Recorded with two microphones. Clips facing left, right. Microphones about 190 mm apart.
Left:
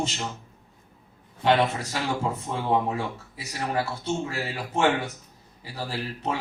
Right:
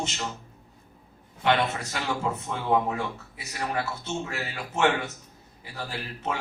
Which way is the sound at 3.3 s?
35° left (ahead or behind).